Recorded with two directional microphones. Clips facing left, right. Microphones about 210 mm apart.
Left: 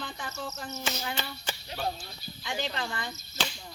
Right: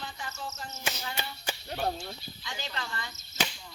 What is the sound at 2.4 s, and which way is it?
Speech, 55° left (ahead or behind).